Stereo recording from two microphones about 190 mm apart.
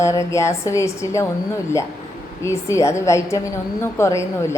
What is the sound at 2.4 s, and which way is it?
A woman's voice, 15° left (ahead or behind).